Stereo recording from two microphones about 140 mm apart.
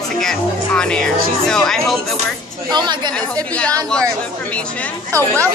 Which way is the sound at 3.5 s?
10° left (ahead or behind).